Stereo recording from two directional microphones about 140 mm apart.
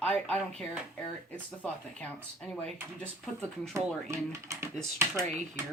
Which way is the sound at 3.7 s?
20° right (ahead or behind).